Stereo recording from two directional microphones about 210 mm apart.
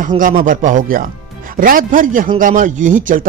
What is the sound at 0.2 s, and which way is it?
Speech, 40° right (ahead or behind).